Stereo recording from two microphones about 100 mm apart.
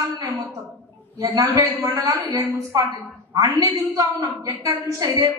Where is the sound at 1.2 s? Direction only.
35° right (ahead or behind).